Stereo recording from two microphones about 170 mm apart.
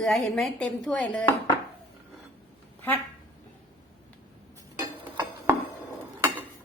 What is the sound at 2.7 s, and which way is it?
Quack, 10° left (ahead or behind).